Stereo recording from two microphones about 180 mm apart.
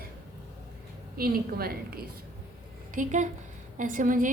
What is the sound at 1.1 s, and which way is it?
Speech, 55° right (ahead or behind).